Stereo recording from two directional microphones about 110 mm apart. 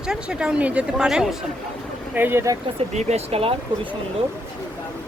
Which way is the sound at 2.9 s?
90° right.